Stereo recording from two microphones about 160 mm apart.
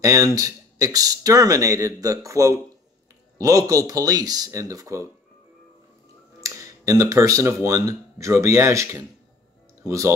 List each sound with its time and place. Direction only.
0.0 s speech: 20° right (ahead or behind)
6.4 s speech: 20° right (ahead or behind)